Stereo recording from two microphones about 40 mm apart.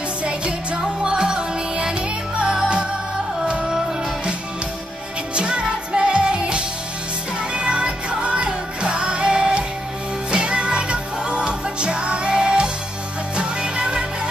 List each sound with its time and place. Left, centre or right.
1.0 s music: right
5.3 s music: right